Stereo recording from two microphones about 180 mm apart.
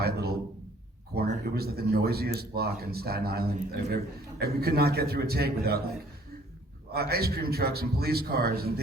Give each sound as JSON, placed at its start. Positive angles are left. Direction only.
{"t": 0.0, "sound": "a sound", "side_deg": -60}
{"t": 1.5, "sound": "speech", "side_deg": -60}
{"t": 6.9, "sound": "speech", "side_deg": -60}